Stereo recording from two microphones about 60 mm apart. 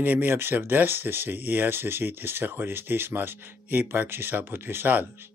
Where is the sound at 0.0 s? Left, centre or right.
Right.